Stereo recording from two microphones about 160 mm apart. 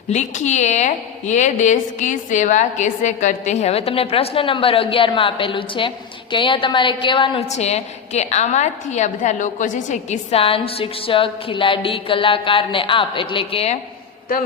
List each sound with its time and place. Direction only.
0.1 s a woman's voice: 45° left (ahead or behind); by 7.4 s 30° left (ahead or behind)
7.4 s a woman's voice: 45° left (ahead or behind)